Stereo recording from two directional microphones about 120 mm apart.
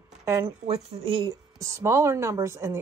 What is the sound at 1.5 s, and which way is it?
Speech, 25° right (ahead or behind).